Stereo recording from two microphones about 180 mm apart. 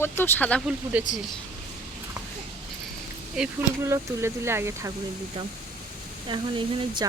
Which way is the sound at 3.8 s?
15° right (ahead or behind).